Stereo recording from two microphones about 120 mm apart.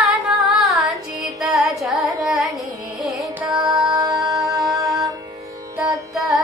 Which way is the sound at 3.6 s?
30° right (ahead or behind).